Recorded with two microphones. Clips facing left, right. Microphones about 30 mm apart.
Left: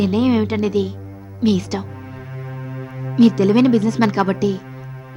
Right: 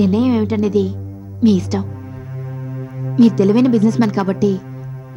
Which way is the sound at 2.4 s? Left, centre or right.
Left.